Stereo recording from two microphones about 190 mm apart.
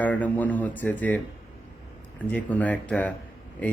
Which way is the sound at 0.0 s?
10° left (ahead or behind).